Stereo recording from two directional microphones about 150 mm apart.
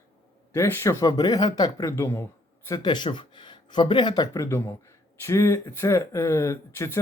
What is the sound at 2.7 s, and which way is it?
Speech, 30° left (ahead or behind).